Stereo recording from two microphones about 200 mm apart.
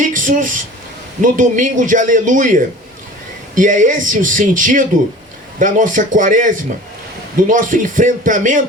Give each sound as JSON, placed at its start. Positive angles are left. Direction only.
{"t": 0.0, "sound": "a sound", "side_deg": -40}
{"t": 1.2, "sound": "speech", "side_deg": -40}
{"t": 3.5, "sound": "speech", "side_deg": -40}